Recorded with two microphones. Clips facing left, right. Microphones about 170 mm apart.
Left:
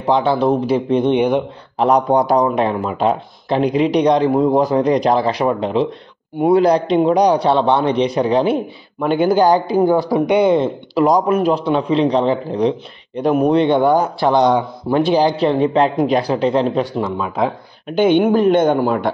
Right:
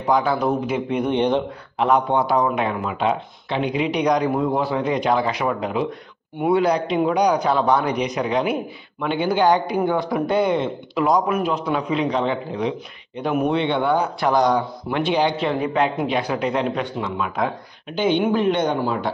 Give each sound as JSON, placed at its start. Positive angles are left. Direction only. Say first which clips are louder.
{"t": 0.0, "sound": "speech", "louder": "left 4 dB", "side_deg": 30}
{"t": 1.1, "sound": "speech", "louder": "left 1 dB", "side_deg": 10}
{"t": 1.8, "sound": "a man's voice", "louder": "left 5 dB", "side_deg": 40}
{"t": 9.0, "sound": "a man's voice", "louder": "left 5 dB", "side_deg": 45}
{"t": 10.2, "sound": "speech", "louder": "left 5 dB", "side_deg": 20}
{"t": 10.5, "sound": "a man's voice", "louder": "left 6 dB", "side_deg": 35}
{"t": 14.3, "sound": "speech", "louder": "left 4 dB", "side_deg": 25}
{"t": 15.0, "sound": "a man's voice", "louder": "left 6 dB", "side_deg": 35}
{"t": 17.8, "sound": "speech", "louder": "left 6 dB", "side_deg": 55}